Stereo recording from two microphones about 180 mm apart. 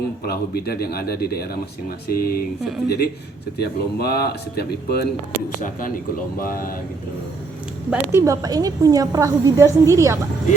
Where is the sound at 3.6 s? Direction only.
60° left (ahead or behind).